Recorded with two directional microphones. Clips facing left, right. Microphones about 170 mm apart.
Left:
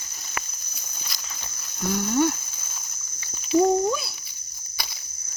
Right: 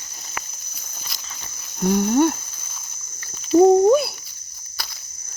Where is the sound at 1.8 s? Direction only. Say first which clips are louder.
Right 5 dB; 50° right (ahead or behind).